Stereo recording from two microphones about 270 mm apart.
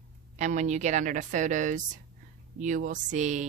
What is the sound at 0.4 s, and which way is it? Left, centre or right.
A woman's voice, right.